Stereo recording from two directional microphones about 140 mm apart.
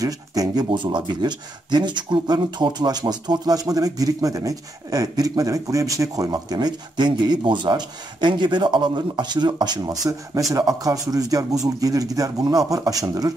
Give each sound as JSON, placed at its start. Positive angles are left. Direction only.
{"t": 0.0, "sound": "speech", "side_deg": -25}